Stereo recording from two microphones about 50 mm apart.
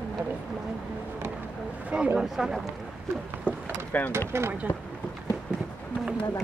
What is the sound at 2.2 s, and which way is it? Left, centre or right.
Speech, centre.